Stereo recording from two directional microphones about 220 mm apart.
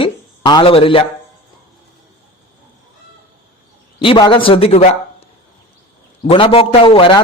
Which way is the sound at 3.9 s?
20° left (ahead or behind).